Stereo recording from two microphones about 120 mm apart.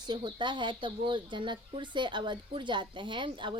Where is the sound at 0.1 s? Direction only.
40° right (ahead or behind).